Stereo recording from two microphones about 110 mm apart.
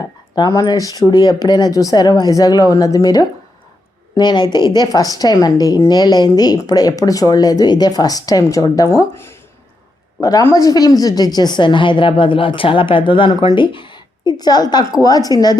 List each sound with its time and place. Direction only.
0.3 s a woman's voice: 40° left (ahead or behind); by 9.3 s 25° left (ahead or behind)
10.2 s a woman's voice: 35° left (ahead or behind)